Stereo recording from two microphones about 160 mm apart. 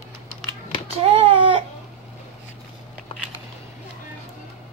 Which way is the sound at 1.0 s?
35° right (ahead or behind).